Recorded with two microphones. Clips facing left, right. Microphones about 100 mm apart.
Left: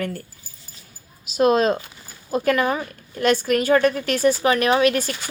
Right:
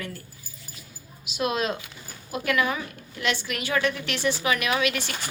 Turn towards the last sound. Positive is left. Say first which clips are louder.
# left 8 dB
turn(degrees=40)  # may be behind; listen again after turning